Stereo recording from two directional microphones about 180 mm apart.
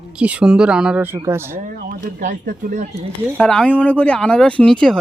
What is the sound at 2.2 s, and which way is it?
Speech, 45° right (ahead or behind).